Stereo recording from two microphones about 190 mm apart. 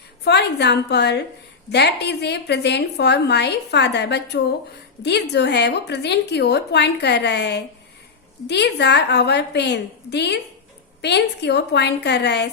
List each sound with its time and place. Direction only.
0.3 s a woman's voice: 60° left (ahead or behind)